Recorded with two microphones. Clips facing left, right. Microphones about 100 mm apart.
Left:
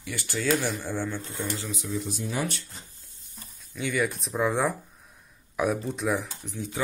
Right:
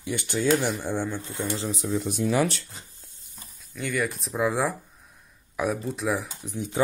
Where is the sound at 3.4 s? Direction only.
Centre (ahead or behind).